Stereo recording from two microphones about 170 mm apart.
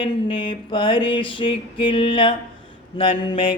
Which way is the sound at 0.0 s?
30° left (ahead or behind).